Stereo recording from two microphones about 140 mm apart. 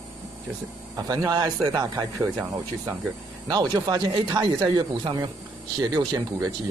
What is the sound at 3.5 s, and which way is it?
Speech, 30° right (ahead or behind).